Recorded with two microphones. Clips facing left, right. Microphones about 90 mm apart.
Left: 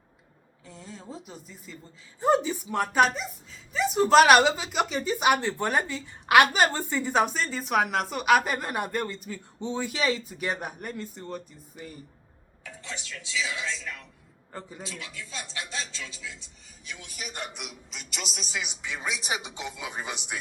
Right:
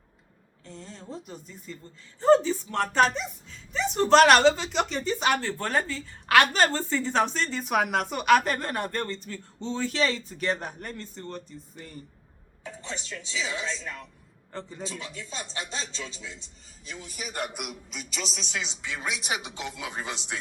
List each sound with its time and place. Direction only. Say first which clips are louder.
0.6 s a man's voice: right 1 dB; 5° left (ahead or behind)
12.6 s speech: right 3 dB; 30° right (ahead or behind)
14.5 s speech: right 3 dB; 10° left (ahead or behind)
14.8 s speech: right 3 dB; 35° right (ahead or behind)
17.3 s a man's voice: right 7 dB; 5° right (ahead or behind); by 20.4 s 15° left (ahead or behind)